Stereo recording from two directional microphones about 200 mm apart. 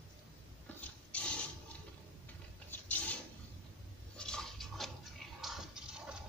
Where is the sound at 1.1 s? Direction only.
5° left (ahead or behind).